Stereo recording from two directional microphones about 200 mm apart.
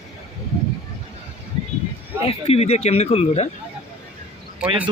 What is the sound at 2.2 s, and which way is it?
Speech, 30° left (ahead or behind).